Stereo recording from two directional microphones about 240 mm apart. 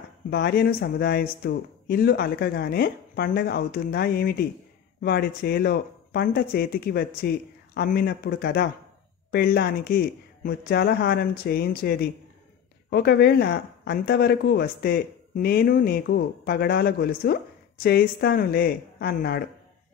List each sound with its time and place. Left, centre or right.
0.3 s speech: left